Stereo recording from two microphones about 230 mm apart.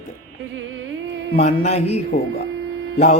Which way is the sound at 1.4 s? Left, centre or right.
Left.